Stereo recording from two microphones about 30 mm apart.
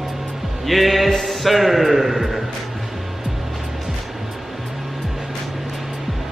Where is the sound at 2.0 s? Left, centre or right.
Centre.